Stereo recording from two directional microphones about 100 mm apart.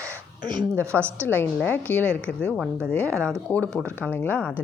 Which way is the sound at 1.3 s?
15° left (ahead or behind).